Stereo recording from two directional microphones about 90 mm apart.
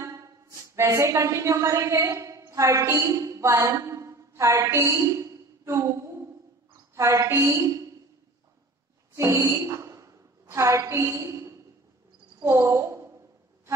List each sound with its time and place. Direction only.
0.0 s a woman's voice: 35° right (ahead or behind)
9.1 s a woman's voice: 30° right (ahead or behind)